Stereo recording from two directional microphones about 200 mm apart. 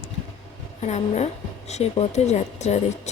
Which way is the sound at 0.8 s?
35° left (ahead or behind).